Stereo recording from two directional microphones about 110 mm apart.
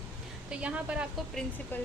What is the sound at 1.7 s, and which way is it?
Speech, 20° left (ahead or behind).